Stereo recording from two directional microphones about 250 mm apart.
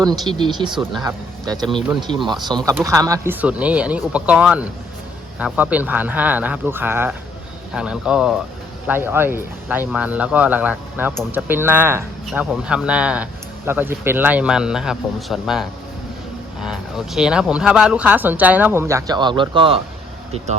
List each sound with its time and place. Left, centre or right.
0.0 s speech: centre
2.0 s speech: centre